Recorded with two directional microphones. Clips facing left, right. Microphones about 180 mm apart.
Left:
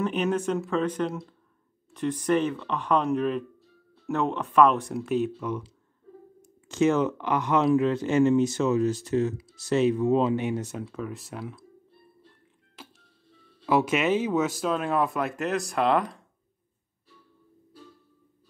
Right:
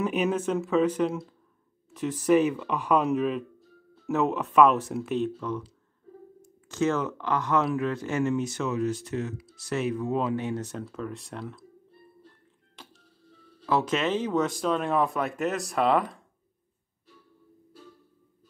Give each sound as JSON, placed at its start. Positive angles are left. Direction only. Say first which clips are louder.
{"t": 0.0, "sound": "speech", "louder": "even", "side_deg": -5}
{"t": 6.7, "sound": "speech", "louder": "left 4 dB", "side_deg": 15}
{"t": 12.8, "sound": "music", "louder": "left 3 dB", "side_deg": 5}
{"t": 13.7, "sound": "speech", "louder": "left 3 dB", "side_deg": 10}